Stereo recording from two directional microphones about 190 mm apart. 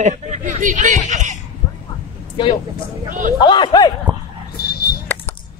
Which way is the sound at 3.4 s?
25° left (ahead or behind).